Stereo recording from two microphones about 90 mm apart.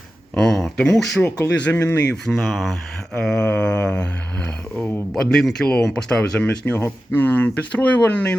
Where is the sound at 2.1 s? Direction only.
5° left (ahead or behind); by 5.0 s 20° left (ahead or behind).